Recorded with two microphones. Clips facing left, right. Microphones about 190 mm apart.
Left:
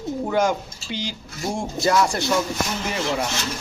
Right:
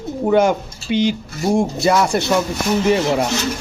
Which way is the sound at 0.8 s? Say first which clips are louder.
Right 13 dB; 20° right (ahead or behind).